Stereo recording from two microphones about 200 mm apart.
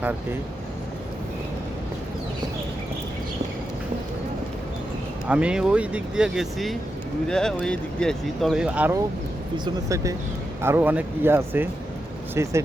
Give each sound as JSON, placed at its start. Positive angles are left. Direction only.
{"t": 5.3, "sound": "speech", "side_deg": -5}